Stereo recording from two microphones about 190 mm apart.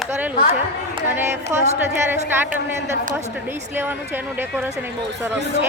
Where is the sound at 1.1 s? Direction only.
10° right (ahead or behind).